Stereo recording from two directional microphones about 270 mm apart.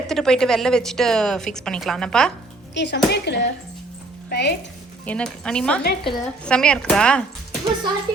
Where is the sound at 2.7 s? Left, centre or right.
Left.